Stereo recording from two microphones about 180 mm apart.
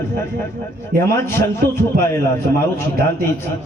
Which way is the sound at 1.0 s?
15° left (ahead or behind).